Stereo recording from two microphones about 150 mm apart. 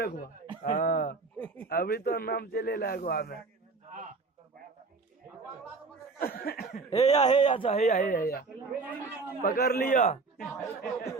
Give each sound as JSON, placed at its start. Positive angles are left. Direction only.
{"t": 0.6, "sound": "speech", "side_deg": 70}
{"t": 6.1, "sound": "a sound", "side_deg": 80}
{"t": 6.9, "sound": "speech", "side_deg": 45}
{"t": 9.4, "sound": "a man's voice", "side_deg": 85}
{"t": 10.6, "sound": "speech", "side_deg": 20}